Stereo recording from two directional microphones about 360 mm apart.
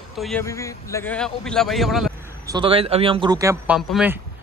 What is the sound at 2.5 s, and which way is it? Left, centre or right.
A man's voice, centre.